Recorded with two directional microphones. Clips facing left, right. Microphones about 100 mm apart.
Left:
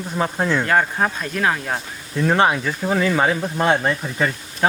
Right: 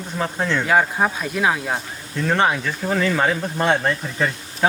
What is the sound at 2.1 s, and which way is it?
Speech, 5° left (ahead or behind).